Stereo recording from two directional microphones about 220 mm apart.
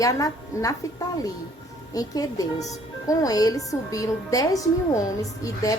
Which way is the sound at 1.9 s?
15° left (ahead or behind).